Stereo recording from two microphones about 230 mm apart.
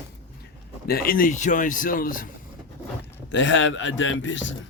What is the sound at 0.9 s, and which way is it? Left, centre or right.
A man's voice, left.